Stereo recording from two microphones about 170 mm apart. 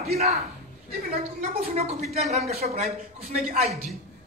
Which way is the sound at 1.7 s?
40° right (ahead or behind).